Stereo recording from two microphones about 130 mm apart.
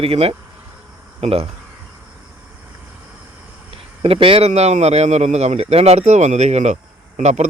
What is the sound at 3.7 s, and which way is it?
A man's voice, 45° right (ahead or behind).